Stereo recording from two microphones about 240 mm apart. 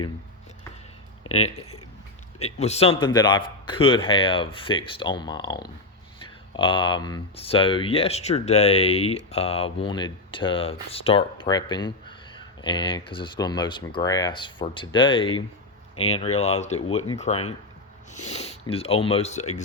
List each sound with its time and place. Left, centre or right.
1.3 s speech: left